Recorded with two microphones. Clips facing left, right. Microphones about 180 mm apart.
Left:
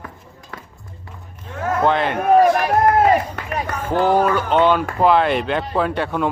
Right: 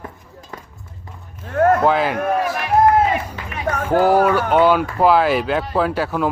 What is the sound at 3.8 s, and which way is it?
Speech, 10° right (ahead or behind).